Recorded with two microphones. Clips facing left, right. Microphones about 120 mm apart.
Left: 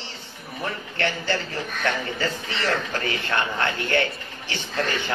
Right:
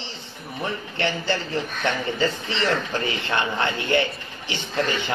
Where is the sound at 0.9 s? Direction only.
20° right (ahead or behind).